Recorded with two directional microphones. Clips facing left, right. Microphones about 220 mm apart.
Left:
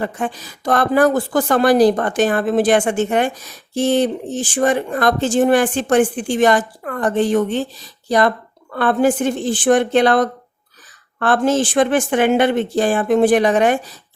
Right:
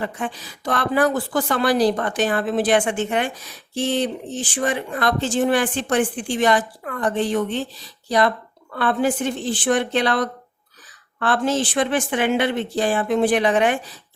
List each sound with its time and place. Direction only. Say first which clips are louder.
0.0 s a woman's voice: left 4 dB; 45° left (ahead or behind)